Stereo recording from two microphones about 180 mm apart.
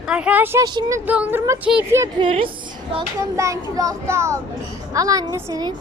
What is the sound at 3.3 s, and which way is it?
A child's voice, 15° right (ahead or behind).